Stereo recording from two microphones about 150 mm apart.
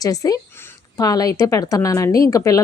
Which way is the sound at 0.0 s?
25° left (ahead or behind).